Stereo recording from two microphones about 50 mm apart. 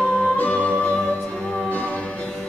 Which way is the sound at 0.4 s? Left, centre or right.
Left.